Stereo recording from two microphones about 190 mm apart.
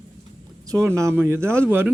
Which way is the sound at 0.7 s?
15° right (ahead or behind).